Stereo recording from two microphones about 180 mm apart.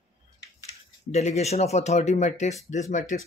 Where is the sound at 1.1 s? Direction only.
40° left (ahead or behind).